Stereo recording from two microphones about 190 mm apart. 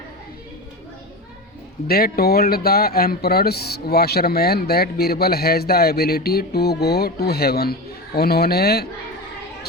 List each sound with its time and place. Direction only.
1.9 s speech: 50° left (ahead or behind)